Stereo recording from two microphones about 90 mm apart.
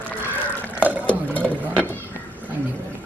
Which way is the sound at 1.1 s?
15° left (ahead or behind).